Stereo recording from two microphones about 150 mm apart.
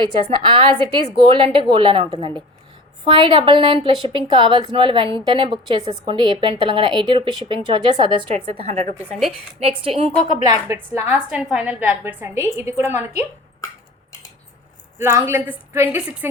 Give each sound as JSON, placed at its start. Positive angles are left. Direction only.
{"t": 0.4, "sound": "a woman's voice", "side_deg": -30}
{"t": 3.1, "sound": "a woman's voice", "side_deg": -35}
{"t": 10.5, "sound": "a woman's voice", "side_deg": -20}
{"t": 14.9, "sound": "a woman's voice", "side_deg": -15}